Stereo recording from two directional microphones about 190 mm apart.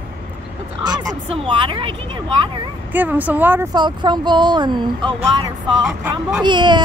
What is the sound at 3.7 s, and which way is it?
Speech, 25° right (ahead or behind).